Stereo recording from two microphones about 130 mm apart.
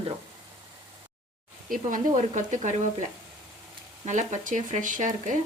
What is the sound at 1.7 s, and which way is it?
Speech, 85° right.